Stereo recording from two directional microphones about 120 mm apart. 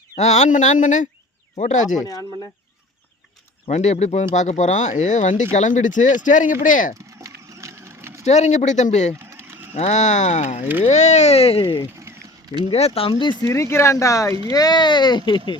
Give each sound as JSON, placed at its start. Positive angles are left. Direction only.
{"t": 0.2, "sound": "speech", "side_deg": 70}
{"t": 2.0, "sound": "speech", "side_deg": 30}
{"t": 3.7, "sound": "speech", "side_deg": 70}
{"t": 7.2, "sound": "a sound", "side_deg": -25}
{"t": 8.2, "sound": "speech", "side_deg": 70}
{"t": 9.1, "sound": "bird", "side_deg": -20}
{"t": 9.7, "sound": "speech", "side_deg": 70}
{"t": 11.6, "sound": "speech", "side_deg": 35}
{"t": 12.1, "sound": "a sound", "side_deg": -20}
{"t": 12.7, "sound": "speech", "side_deg": 60}
{"t": 13.5, "sound": "speech", "side_deg": 20}